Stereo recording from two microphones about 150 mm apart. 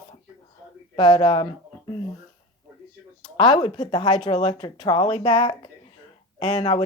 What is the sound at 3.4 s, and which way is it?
Speech, 30° left (ahead or behind).